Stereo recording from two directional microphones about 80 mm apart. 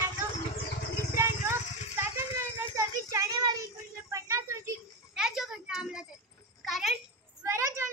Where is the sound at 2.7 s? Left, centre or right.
Right.